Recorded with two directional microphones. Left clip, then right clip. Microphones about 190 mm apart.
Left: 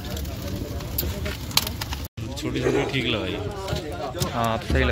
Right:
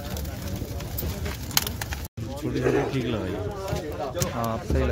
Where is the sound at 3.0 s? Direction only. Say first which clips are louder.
Left 4 dB; 45° right (ahead or behind).